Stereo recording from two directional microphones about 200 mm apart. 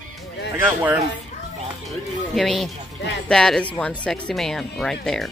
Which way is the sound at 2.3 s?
Centre (ahead or behind).